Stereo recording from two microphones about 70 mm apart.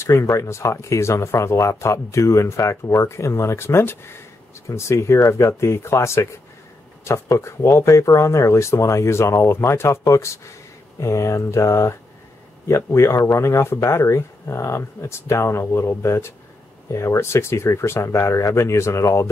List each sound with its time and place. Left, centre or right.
0.0 s speech: left